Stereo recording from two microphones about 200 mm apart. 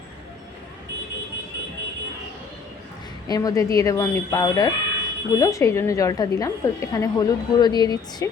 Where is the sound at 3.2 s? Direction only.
20° left (ahead or behind).